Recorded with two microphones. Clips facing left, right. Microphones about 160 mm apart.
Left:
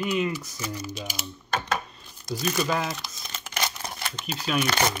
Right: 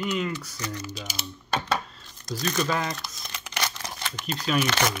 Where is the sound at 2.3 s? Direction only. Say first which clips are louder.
Left 1 dB; 10° left (ahead or behind).